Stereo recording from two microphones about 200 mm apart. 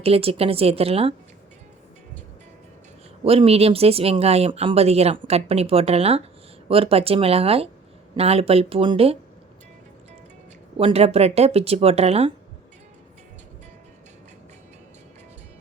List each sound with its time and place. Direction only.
0.0 s a woman's voice: 30° right (ahead or behind)
3.2 s a woman's voice: 30° right (ahead or behind)
10.8 s speech: 30° right (ahead or behind)